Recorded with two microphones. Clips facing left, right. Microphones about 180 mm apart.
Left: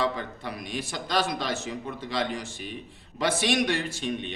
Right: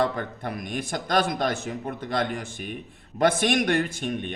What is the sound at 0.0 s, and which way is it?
A man's voice, 50° right (ahead or behind).